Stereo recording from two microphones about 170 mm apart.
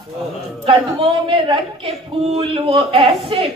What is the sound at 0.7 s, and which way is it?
A woman's voice, 30° right (ahead or behind).